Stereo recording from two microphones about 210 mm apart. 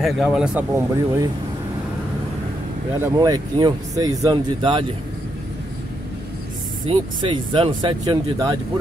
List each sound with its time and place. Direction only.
0.0 s speech: centre (ahead or behind)
3.0 s speech: 20° right (ahead or behind)
6.9 s speech: 25° right (ahead or behind)